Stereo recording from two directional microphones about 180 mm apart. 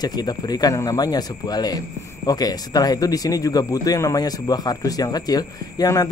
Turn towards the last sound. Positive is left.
turn(degrees=20)  # may be behind; listen again after turning